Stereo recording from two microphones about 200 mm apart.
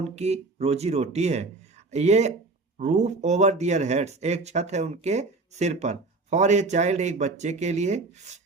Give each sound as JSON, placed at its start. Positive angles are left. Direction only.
{"t": 0.2, "sound": "speech", "side_deg": -30}